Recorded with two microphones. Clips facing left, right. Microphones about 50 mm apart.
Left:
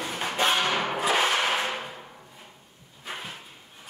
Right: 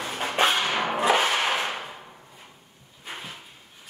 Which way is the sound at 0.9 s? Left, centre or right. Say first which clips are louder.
Right 5 dB; right.